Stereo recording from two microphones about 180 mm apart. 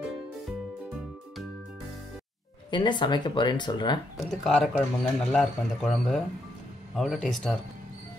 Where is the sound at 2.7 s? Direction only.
25° left (ahead or behind).